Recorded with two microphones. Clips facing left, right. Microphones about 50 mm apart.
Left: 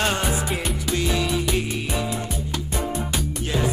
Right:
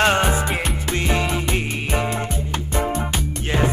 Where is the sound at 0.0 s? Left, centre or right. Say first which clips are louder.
Right 6 dB; right.